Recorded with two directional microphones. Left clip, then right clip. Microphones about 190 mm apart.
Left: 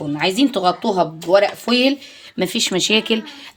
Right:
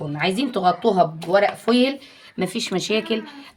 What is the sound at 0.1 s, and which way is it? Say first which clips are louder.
Speech: left 5 dB; 35° left (ahead or behind).